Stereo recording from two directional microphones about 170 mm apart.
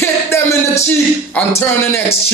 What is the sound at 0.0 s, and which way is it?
Music, 15° left (ahead or behind).